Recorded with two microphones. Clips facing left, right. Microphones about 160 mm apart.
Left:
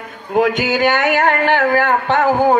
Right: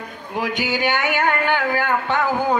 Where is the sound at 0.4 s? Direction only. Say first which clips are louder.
Left 8 dB; 50° left (ahead or behind).